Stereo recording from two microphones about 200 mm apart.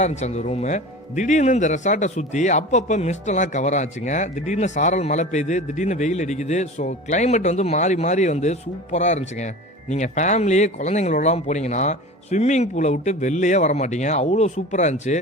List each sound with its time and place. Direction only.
0.0 s speech: 35° left (ahead or behind)